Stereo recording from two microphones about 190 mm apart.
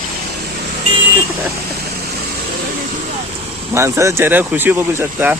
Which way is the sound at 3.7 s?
15° right (ahead or behind).